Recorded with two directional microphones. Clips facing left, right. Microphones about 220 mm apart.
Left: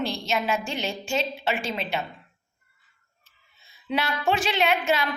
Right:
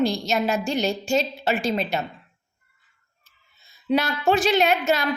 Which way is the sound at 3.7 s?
40° right (ahead or behind).